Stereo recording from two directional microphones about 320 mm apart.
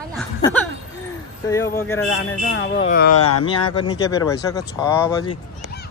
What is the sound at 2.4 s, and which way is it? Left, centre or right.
Speech, left.